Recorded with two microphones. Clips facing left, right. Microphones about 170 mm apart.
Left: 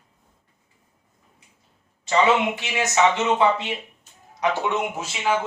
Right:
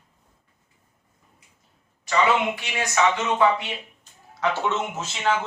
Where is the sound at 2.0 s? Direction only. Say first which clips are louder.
Left 2 dB; 25° left (ahead or behind).